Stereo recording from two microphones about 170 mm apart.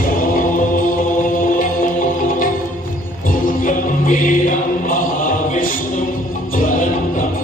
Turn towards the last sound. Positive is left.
turn(degrees=50)  # may be behind; listen again after turning